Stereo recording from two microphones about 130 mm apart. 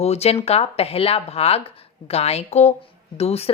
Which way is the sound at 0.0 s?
55° left (ahead or behind).